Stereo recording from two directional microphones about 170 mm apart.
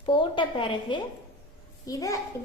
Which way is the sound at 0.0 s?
30° left (ahead or behind).